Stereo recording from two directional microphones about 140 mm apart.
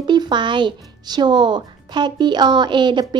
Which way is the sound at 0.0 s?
30° right (ahead or behind).